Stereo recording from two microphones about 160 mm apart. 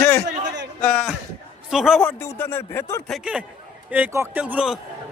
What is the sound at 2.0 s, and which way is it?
Speech, 15° left (ahead or behind).